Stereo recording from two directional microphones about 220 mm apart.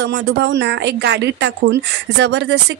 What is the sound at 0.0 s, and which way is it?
Speech, 55° right (ahead or behind).